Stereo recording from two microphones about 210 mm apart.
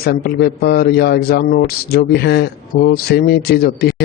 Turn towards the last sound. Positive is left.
turn(degrees=50)  # may be behind; listen again after turning